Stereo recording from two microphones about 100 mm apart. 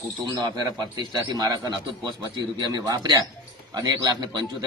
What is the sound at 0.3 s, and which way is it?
A man's voice, 40° right (ahead or behind).